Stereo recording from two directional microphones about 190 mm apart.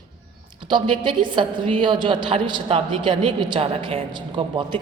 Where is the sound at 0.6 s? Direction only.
25° right (ahead or behind).